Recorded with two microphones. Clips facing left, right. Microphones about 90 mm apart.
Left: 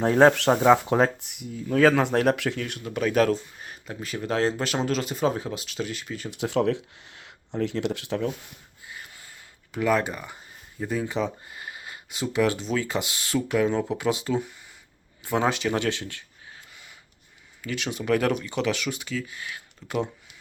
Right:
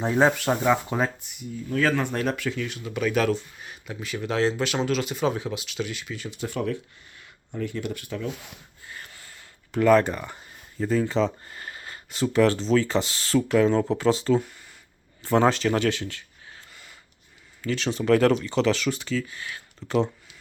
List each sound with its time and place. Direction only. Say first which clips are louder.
0.0 s speech: left 3 dB; 55° left (ahead or behind)
0.3 s speech: left 4 dB; 5° right (ahead or behind)
0.5 s speech: left 4 dB; 35° left (ahead or behind)
0.9 s speech: left 4 dB; 70° left (ahead or behind)
2.6 s speech: even; 50° left (ahead or behind)
6.3 s speech: left 5 dB; 85° left
8.3 s speech: even; 90° right
8.9 s a sound: right 1 dB; 10° left (ahead or behind)
10.8 s speech: right 4 dB; 10° left (ahead or behind)
15.7 s speech: right 2 dB; 25° left (ahead or behind)
17.6 s speech: right 4 dB; 10° left (ahead or behind)